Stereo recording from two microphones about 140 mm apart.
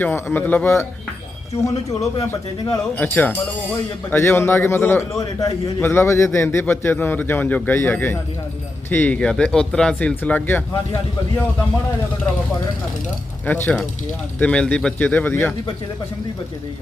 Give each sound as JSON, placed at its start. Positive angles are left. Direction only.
{"t": 0.0, "sound": "a man's voice", "side_deg": 15}
{"t": 1.9, "sound": "a man's voice", "side_deg": 25}
{"t": 13.4, "sound": "a man's voice", "side_deg": 10}